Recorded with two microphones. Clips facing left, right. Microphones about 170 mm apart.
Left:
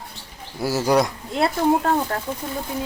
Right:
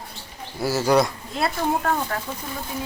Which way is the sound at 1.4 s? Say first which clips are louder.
Left 5 dB; 30° left (ahead or behind).